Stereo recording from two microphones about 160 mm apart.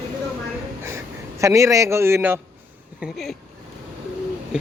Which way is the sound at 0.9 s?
15° right (ahead or behind).